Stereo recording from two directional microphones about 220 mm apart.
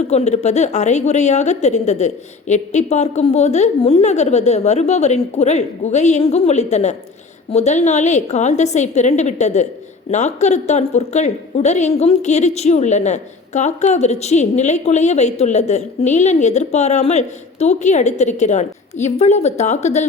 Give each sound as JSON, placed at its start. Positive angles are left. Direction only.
{"t": 0.1, "sound": "a woman's voice", "side_deg": 30}